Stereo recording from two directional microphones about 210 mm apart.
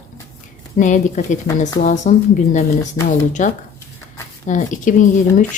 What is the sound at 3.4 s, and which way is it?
A woman's voice, 35° left (ahead or behind).